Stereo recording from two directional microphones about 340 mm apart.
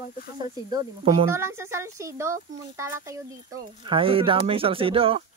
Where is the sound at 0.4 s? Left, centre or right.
Centre.